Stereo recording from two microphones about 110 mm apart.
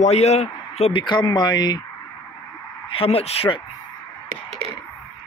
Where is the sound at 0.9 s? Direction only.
45° left (ahead or behind).